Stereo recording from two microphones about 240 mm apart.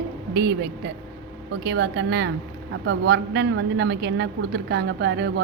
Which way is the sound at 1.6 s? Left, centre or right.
Right.